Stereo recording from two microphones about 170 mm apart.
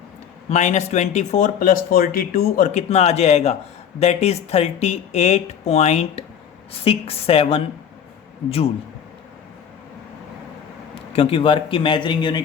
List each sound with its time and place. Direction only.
0.5 s speech: 40° left (ahead or behind)
11.1 s a man's voice: 35° left (ahead or behind)